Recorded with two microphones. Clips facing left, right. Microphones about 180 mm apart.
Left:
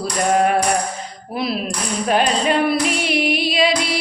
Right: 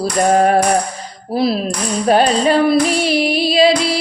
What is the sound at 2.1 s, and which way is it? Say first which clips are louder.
Music: right 5 dB; 35° right (ahead or behind).